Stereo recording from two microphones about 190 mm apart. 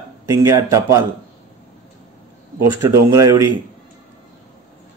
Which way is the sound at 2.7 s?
15° right (ahead or behind).